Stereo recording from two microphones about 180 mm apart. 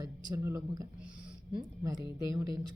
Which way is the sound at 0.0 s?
15° right (ahead or behind).